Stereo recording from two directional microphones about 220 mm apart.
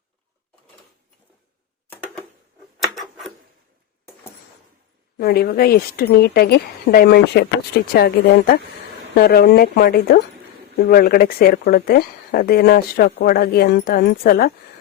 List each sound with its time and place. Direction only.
2.8 s tick-tock: centre (ahead or behind)
5.1 s a woman's voice: 45° left (ahead or behind)